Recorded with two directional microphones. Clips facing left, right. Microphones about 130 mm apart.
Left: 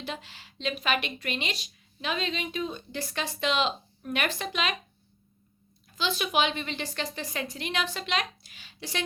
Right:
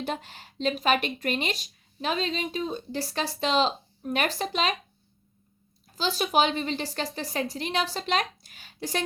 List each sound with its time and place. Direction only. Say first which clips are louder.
0.0 s speech: right 5 dB; 45° right (ahead or behind)
5.8 s speech: right 2 dB; 40° right (ahead or behind)